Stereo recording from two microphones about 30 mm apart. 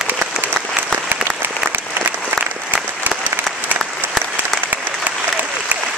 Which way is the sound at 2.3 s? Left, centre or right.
Right.